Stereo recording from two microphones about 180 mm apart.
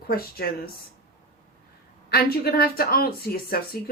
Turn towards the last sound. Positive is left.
turn(degrees=55)  # may be behind; listen again after turning